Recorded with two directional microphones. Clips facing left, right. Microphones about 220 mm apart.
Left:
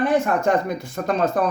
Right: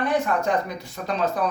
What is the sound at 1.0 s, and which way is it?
Speech, 45° left (ahead or behind).